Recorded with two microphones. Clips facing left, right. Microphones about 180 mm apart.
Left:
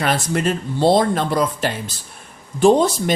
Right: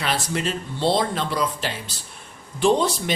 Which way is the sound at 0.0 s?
50° left (ahead or behind).